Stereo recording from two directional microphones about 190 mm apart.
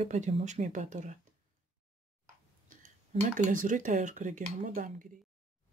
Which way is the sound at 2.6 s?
40° right (ahead or behind).